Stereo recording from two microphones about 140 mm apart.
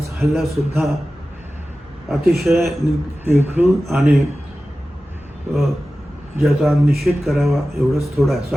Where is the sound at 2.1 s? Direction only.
Centre (ahead or behind).